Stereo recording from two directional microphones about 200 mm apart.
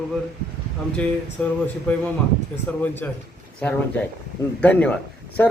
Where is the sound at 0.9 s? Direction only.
5° left (ahead or behind).